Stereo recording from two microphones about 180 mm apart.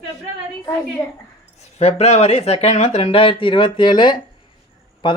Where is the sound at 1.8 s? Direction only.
35° left (ahead or behind).